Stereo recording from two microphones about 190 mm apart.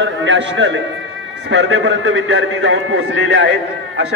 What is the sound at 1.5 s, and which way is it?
A man's voice, 90° right.